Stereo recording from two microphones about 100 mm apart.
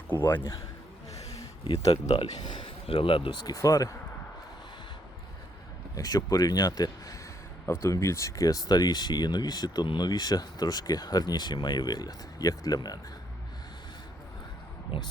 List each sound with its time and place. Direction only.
0.1 s a man's voice: 20° left (ahead or behind)
2.4 s speech: 55° left (ahead or behind)
3.4 s speech: 35° left (ahead or behind)
5.9 s speech: 40° left (ahead or behind)
7.7 s speech: 30° left (ahead or behind)
14.9 s speech: 80° left